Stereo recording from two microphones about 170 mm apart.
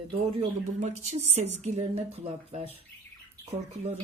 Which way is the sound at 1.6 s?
40° right (ahead or behind).